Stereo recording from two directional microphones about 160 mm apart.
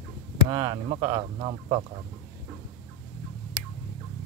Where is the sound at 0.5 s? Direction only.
25° right (ahead or behind).